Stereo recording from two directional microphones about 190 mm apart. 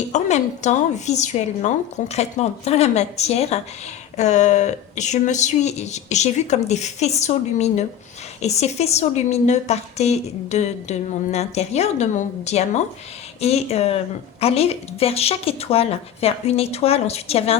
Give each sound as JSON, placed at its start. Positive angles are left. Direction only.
{"t": 0.1, "sound": "a woman's voice", "side_deg": 35}